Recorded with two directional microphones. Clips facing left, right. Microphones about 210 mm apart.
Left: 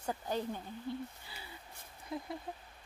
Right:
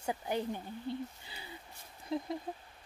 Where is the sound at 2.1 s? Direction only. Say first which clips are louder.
Right 5 dB; 25° right (ahead or behind).